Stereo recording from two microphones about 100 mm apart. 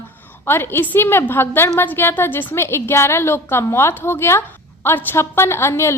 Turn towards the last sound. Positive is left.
turn(degrees=25)  # may be behind; listen again after turning